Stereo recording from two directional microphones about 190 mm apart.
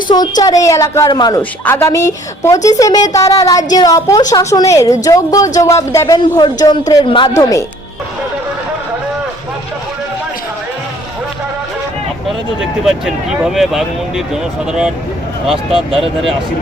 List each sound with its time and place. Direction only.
0.1 s a woman's voice: 20° left (ahead or behind)
12.8 s speech: centre (ahead or behind)